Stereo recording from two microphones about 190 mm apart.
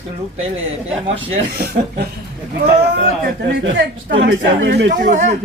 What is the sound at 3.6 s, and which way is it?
Speech, 70° right (ahead or behind).